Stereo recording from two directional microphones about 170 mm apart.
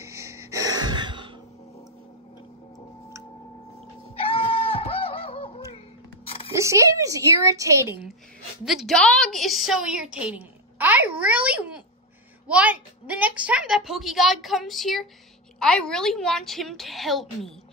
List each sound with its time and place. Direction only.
0.0 s gasp: 15° right (ahead or behind)
4.2 s screaming: 35° left (ahead or behind)
6.2 s a sound: 35° left (ahead or behind)
6.5 s speech: 15° right (ahead or behind)
8.6 s a child's voice: centre (ahead or behind)